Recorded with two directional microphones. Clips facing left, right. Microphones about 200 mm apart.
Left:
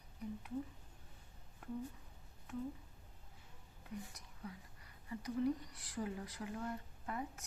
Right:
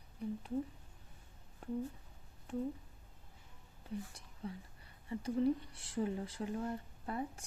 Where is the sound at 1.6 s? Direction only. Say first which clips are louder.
Right 5 dB; 30° right (ahead or behind).